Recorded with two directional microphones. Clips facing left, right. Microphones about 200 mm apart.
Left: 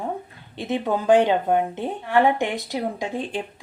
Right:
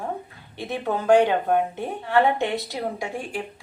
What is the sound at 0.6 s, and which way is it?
A woman's voice, 20° left (ahead or behind).